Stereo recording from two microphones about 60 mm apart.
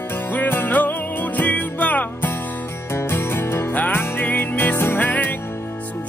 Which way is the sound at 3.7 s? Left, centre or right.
Left.